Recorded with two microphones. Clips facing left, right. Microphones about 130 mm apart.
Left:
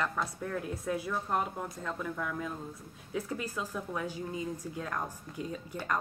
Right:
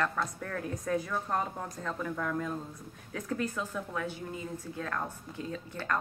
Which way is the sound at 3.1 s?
15° left (ahead or behind).